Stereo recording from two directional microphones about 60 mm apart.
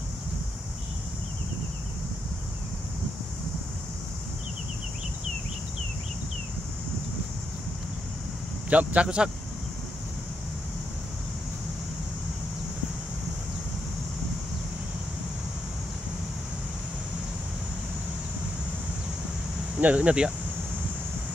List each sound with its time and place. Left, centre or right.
8.6 s a man's voice: right
19.8 s a man's voice: right